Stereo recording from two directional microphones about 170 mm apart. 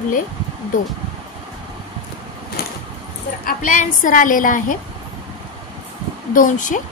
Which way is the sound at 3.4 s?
50° left (ahead or behind).